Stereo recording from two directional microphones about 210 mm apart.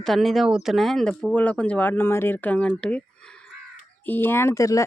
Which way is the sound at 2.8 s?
5° left (ahead or behind).